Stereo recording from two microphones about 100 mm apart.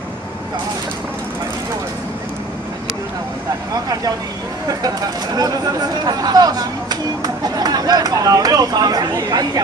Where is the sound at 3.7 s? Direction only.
40° right (ahead or behind).